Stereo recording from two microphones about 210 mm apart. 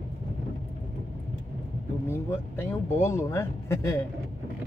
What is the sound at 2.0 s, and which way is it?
Speech, 10° left (ahead or behind).